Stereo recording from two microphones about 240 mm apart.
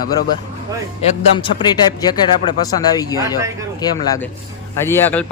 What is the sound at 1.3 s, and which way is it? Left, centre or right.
Speech, centre.